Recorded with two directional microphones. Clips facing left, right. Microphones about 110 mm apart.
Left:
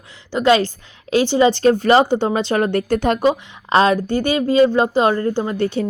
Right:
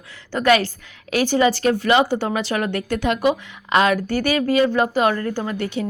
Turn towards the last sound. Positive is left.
turn(degrees=30)  # may be behind; listen again after turning